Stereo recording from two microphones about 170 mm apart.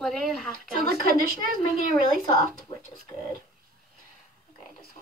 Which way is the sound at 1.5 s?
55° right (ahead or behind).